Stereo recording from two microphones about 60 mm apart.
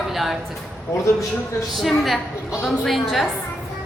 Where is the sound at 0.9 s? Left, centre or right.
Left.